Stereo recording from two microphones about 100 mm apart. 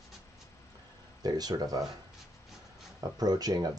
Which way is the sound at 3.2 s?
40° right (ahead or behind).